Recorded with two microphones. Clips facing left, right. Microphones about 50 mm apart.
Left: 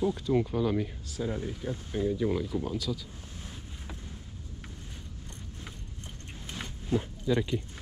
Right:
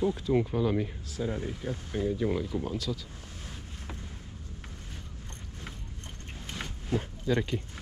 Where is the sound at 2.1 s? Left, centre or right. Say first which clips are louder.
Even; centre.